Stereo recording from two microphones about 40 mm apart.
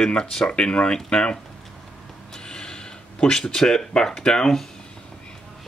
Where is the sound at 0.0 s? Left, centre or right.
Centre.